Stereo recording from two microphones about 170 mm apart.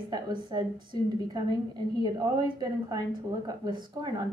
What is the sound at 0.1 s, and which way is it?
Speech, 25° right (ahead or behind).